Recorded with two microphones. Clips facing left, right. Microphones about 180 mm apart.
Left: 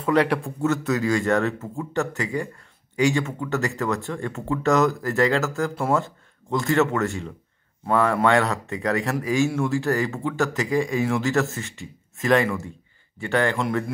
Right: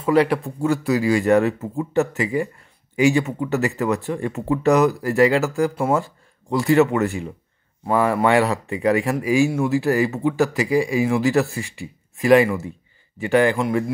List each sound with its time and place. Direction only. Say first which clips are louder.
0.0 s speech: right 3 dB; 5° right (ahead or behind)
6.6 s speech: right 5 dB; 15° right (ahead or behind)
13.6 s speech: right 4 dB; 5° right (ahead or behind)